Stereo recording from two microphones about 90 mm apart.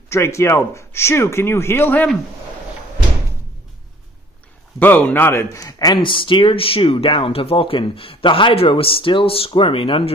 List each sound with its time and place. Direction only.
0.1 s speech: 30° left (ahead or behind)
4.7 s speech: 20° left (ahead or behind); by 5.9 s 40° left (ahead or behind)
6.0 s speech: 70° left (ahead or behind); by 10.1 s 85° left